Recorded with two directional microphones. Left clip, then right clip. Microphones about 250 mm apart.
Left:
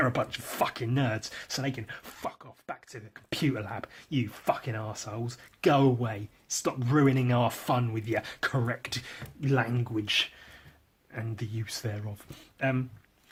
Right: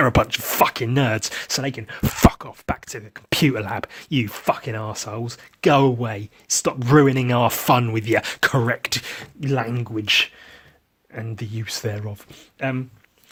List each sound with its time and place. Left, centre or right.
0.0 s speech: right